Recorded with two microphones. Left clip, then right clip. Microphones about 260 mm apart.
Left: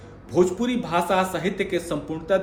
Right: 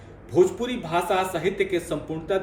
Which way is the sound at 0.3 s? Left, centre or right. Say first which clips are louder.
Even; centre.